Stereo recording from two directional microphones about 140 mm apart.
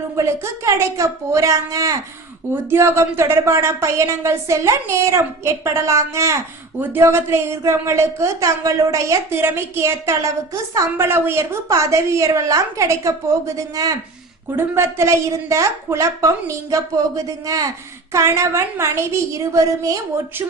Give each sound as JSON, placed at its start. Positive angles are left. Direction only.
{"t": 0.2, "sound": "speech", "side_deg": -20}